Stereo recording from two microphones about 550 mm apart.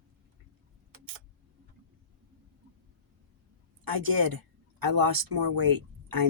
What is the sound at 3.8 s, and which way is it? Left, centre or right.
Speech, right.